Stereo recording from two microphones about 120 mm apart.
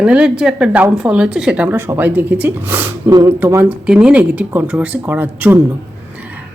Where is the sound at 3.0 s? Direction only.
30° right (ahead or behind).